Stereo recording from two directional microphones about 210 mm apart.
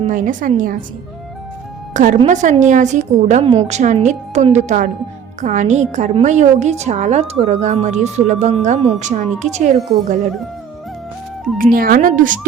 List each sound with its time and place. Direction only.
0.0 s a woman's voice: 40° right (ahead or behind)
1.9 s a woman's voice: 35° right (ahead or behind)
11.5 s a woman's voice: 40° right (ahead or behind)